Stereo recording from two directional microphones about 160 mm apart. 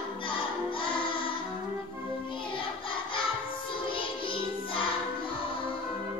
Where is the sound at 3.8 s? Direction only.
35° left (ahead or behind).